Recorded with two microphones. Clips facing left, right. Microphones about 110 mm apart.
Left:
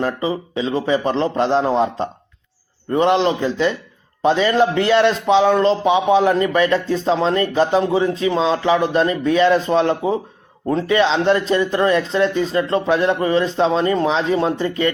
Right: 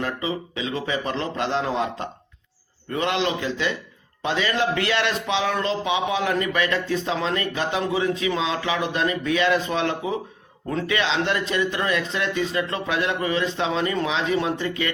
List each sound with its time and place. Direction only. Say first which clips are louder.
0.0 s speech: left 6 dB; 30° left (ahead or behind)